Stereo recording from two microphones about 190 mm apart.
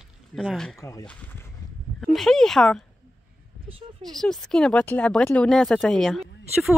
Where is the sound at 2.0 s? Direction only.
Centre (ahead or behind).